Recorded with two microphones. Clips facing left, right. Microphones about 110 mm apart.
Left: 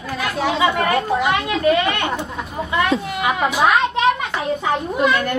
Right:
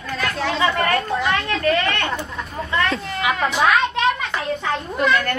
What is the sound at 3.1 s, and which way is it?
A child's voice, 10° left (ahead or behind).